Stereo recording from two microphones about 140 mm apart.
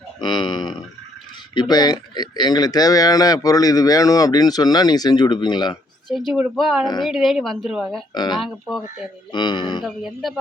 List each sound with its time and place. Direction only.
0.2 s a sound: 30° left (ahead or behind)
1.5 s speech: 30° left (ahead or behind)
6.1 s speech: centre (ahead or behind)
6.8 s speech: 30° left (ahead or behind)
7.1 s speech: centre (ahead or behind)
8.1 s speech: 30° left (ahead or behind)
8.4 s speech: centre (ahead or behind)
9.3 s speech: 35° left (ahead or behind)
9.8 s speech: centre (ahead or behind)